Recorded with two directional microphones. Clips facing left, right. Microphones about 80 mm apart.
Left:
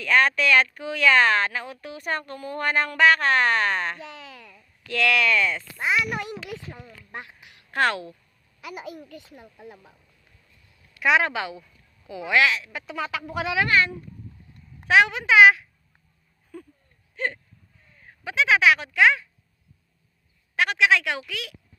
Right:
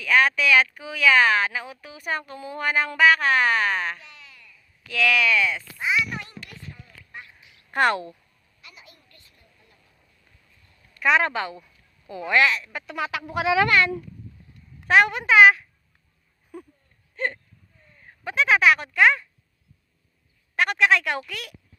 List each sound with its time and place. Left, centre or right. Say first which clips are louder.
0.0 s a woman's voice: even; centre
4.0 s a sound: left 8 dB; left
4.9 s a woman's voice: even; centre
6.1 s a woman's voice: left 6 dB; left
7.7 s a woman's voice: right 2 dB; centre
8.6 s a child's voice: left 14 dB; left
10.9 s a woman's voice: even; centre
13.7 s speech: right 1 dB; right
14.8 s a woman's voice: even; centre
16.5 s speech: right 1 dB; centre
17.2 s a woman's voice: right 1 dB; centre
20.6 s a woman's voice: even; centre